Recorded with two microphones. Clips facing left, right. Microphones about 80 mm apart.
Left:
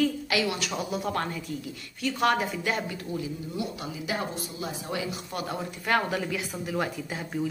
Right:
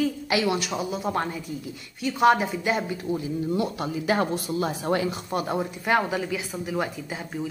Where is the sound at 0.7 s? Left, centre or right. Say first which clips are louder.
Right 2 dB; centre.